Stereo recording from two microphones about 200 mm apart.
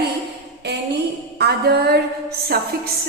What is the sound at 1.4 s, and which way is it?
A woman's voice, 55° right (ahead or behind).